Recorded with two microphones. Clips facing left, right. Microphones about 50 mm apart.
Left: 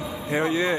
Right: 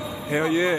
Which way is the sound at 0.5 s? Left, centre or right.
Centre.